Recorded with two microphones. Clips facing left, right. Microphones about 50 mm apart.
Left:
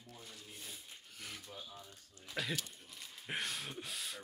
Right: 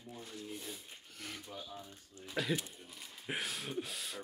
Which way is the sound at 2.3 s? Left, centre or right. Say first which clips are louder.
Right 4 dB; centre.